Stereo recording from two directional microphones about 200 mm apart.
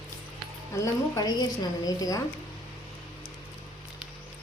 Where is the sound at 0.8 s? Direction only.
15° left (ahead or behind).